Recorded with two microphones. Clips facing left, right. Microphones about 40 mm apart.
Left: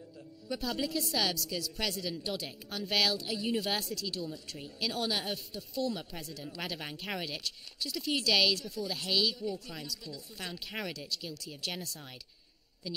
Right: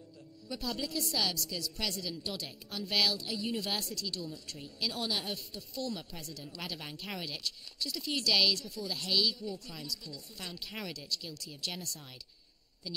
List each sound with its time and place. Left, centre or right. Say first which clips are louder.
0.5 s a woman's voice: left 3 dB; centre